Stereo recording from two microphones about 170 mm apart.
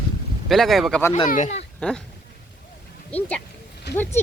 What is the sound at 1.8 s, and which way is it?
Speech, 5° left (ahead or behind).